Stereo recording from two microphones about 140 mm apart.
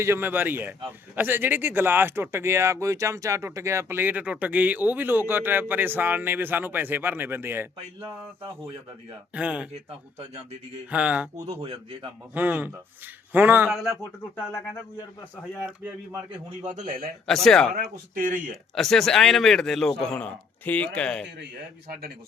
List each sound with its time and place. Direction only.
0.0 s speech: 15° right (ahead or behind)
8.4 s speech: 40° right (ahead or behind)
9.3 s speech: 10° right (ahead or behind)
9.7 s speech: 50° right (ahead or behind)
10.9 s speech: 10° right (ahead or behind)
11.3 s speech: 45° right (ahead or behind)
12.3 s speech: 10° right (ahead or behind)
14.3 s speech: 15° left (ahead or behind)
15.6 s speech: 5° right (ahead or behind)
16.6 s a man's voice: 60° right (ahead or behind)
17.2 s a man's voice: 5° left (ahead or behind)
18.1 s speech: 75° right (ahead or behind)
18.5 s a man's voice: centre (ahead or behind)